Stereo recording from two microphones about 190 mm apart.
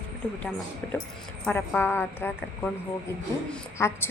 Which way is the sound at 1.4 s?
10° left (ahead or behind).